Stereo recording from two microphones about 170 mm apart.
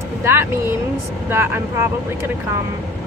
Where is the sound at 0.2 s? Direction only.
15° right (ahead or behind).